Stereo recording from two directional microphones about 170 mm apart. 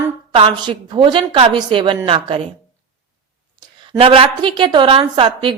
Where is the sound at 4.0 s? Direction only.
30° right (ahead or behind).